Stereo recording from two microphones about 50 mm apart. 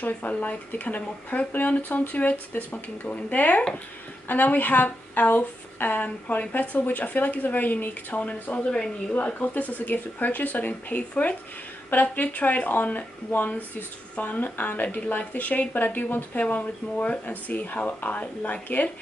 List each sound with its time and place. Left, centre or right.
0.0 s speech: left
8.6 s speech: centre
9.1 s speech: left